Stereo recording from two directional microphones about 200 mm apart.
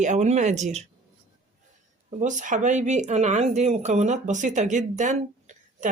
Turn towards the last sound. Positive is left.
turn(degrees=-35)  # may be behind; listen again after turning